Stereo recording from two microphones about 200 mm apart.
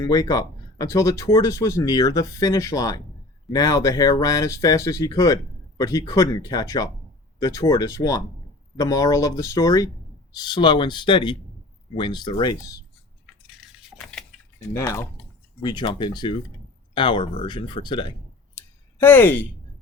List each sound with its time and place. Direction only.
0.0 s speech: 20° left (ahead or behind)
14.7 s speech: 15° left (ahead or behind)
18.5 s a sound: 10° left (ahead or behind)